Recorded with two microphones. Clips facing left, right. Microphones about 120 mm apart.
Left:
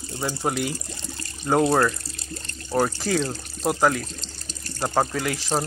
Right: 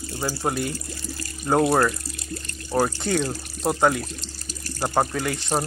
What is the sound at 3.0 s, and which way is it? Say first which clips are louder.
Speech: even; centre (ahead or behind).